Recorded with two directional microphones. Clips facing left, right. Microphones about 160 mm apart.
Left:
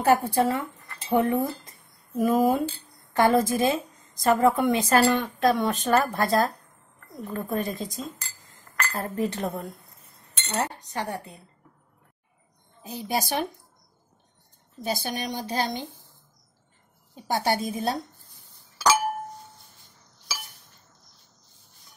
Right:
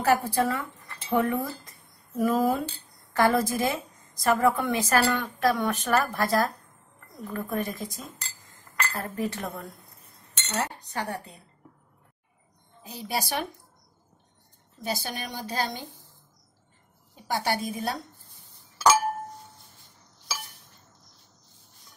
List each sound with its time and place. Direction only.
0.0 s a woman's voice: 25° left (ahead or behind)
8.9 s speech: 35° left (ahead or behind)
10.4 s cutlery: 30° left (ahead or behind)
11.0 s a woman's voice: 20° left (ahead or behind)
12.8 s a woman's voice: 20° left (ahead or behind)
14.9 s a woman's voice: 20° left (ahead or behind)
17.1 s a woman's voice: 25° left (ahead or behind)